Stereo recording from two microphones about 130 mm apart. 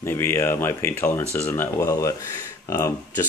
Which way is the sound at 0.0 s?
20° left (ahead or behind).